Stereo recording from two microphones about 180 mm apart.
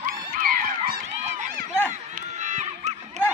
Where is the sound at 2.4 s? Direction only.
40° right (ahead or behind).